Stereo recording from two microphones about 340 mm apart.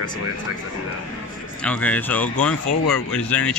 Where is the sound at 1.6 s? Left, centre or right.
Centre.